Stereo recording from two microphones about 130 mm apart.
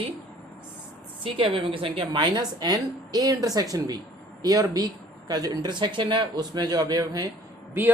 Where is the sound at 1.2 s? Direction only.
45° right (ahead or behind).